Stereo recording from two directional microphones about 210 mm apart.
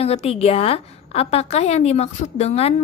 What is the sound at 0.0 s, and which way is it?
A woman's voice, 30° left (ahead or behind).